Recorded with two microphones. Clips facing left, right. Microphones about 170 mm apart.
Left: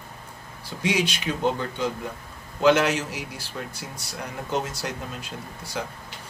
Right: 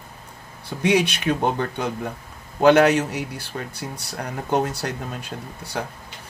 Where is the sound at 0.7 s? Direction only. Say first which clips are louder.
Right 5 dB; 60° right (ahead or behind).